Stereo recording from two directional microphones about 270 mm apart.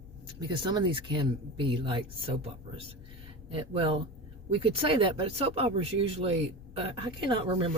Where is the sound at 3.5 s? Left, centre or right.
Right.